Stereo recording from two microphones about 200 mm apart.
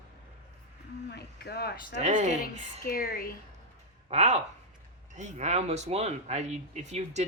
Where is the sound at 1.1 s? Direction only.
55° left (ahead or behind).